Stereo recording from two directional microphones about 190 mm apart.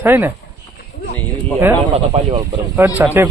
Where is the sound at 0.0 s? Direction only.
10° right (ahead or behind).